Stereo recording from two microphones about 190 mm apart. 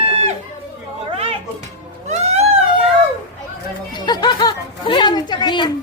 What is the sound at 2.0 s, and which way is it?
Cat, 35° right (ahead or behind).